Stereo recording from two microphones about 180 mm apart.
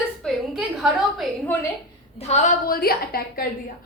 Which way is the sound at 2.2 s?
35° left (ahead or behind).